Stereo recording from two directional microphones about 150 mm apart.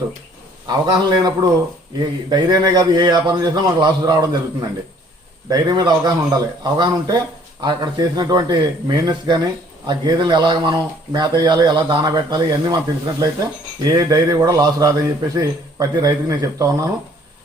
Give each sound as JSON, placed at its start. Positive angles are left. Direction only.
{"t": 0.7, "sound": "a man's voice", "side_deg": -25}